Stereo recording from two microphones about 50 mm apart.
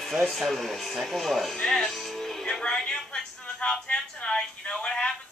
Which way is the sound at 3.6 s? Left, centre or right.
Centre.